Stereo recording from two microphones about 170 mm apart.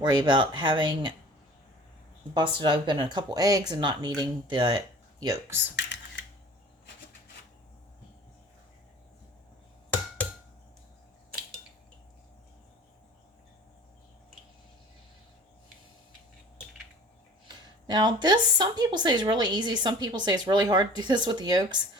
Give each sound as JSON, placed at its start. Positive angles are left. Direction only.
{"t": 0.0, "sound": "a woman's voice", "side_deg": -25}
{"t": 2.3, "sound": "a woman's voice", "side_deg": -30}
{"t": 5.7, "sound": "typing", "side_deg": 90}
{"t": 17.8, "sound": "a woman's voice", "side_deg": -25}